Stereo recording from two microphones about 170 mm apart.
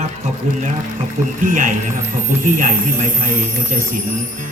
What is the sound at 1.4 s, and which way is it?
A man's voice, 50° right (ahead or behind).